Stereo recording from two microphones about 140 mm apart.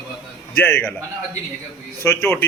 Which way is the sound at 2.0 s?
15° left (ahead or behind).